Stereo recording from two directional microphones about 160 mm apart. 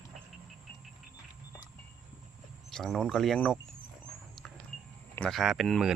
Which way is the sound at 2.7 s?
5° left (ahead or behind).